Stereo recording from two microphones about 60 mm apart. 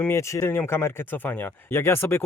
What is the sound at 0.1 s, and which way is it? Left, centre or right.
Speech, left.